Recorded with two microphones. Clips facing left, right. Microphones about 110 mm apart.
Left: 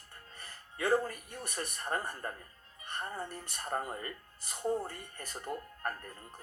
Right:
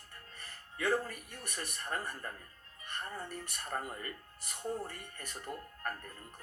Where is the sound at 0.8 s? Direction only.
30° left (ahead or behind).